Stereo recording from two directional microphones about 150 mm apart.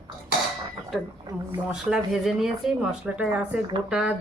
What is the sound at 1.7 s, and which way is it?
Speech, 5° right (ahead or behind).